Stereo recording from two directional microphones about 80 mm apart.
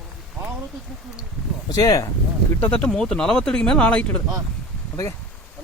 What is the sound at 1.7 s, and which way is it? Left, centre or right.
Speech, left.